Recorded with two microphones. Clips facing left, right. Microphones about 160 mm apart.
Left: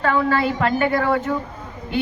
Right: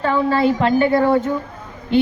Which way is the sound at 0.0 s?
25° right (ahead or behind).